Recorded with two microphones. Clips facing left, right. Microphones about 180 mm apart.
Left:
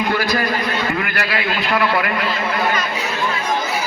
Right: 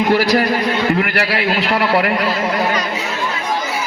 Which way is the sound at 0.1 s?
30° right (ahead or behind).